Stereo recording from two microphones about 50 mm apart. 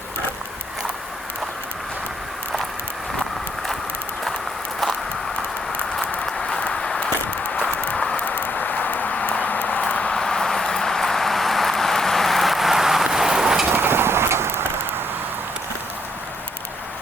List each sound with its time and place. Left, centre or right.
6.6 s a sound: centre
10.2 s vehicle: centre
13.7 s vehicle: right